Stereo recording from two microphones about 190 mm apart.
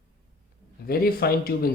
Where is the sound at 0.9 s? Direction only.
50° left (ahead or behind).